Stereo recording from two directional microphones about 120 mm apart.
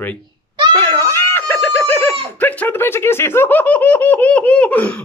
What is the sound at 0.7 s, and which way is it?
Giggle, 20° left (ahead or behind).